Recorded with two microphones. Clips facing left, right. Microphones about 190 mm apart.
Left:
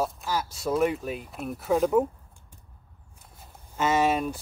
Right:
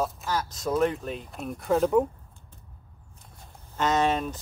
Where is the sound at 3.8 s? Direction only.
10° left (ahead or behind).